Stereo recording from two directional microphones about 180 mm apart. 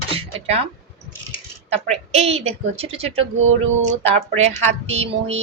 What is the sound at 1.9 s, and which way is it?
Speech, 35° right (ahead or behind).